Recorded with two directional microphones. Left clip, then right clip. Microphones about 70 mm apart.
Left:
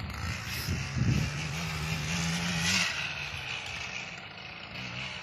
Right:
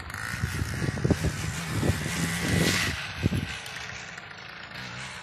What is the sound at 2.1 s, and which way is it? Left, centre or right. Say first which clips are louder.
Vehicle: right 3 dB; right.